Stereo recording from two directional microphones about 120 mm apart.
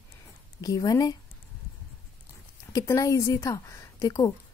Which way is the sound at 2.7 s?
30° left (ahead or behind).